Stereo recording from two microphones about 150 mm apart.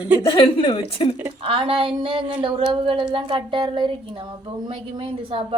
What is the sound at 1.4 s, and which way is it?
Speech, 35° right (ahead or behind).